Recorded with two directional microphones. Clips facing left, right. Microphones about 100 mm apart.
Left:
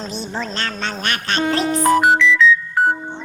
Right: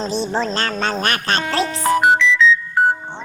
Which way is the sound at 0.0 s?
35° right (ahead or behind).